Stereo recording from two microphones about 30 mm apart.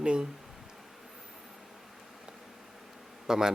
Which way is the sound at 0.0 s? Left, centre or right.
Right.